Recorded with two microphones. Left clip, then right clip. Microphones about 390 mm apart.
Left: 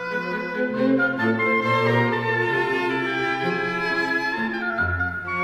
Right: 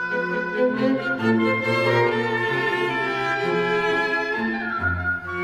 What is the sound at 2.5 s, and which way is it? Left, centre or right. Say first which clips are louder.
Music: even; centre.